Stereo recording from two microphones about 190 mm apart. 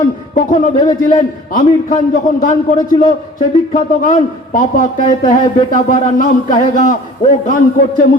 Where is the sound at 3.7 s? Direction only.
40° left (ahead or behind).